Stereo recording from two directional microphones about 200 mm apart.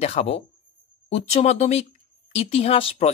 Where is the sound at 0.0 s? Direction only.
30° left (ahead or behind).